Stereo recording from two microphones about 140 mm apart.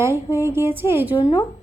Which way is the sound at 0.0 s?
20° right (ahead or behind).